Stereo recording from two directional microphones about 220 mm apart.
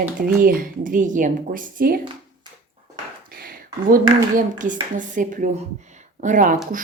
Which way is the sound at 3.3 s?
40° right (ahead or behind).